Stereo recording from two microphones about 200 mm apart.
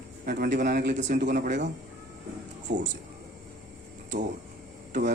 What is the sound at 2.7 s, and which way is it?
Speech, 65° right (ahead or behind).